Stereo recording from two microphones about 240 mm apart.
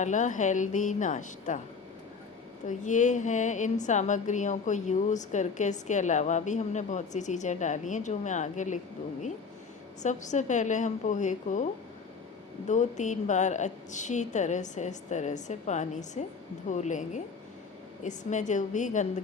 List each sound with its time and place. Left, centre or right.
0.0 s a woman's voice: left
2.6 s a woman's voice: left
10.0 s a woman's voice: left